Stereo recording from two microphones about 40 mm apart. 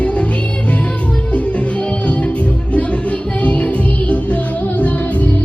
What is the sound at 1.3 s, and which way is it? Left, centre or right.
Music, left.